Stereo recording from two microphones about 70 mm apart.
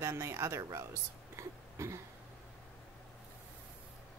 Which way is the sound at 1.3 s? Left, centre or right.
Right.